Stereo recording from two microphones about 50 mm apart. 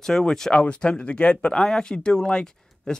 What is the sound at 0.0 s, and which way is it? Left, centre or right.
Speech, centre.